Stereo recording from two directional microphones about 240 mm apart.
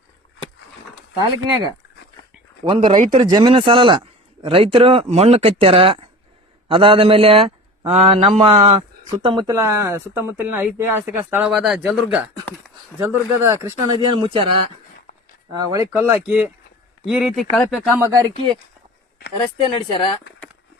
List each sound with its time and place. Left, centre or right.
2.6 s a man's voice: right
3.2 s a man's voice: centre
13.0 s speech: centre
15.1 s a sound: left
15.5 s speech: centre
17.9 s speech: centre
19.4 s speech: centre